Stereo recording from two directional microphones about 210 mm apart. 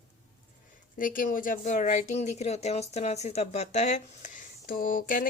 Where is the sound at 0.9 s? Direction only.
40° left (ahead or behind).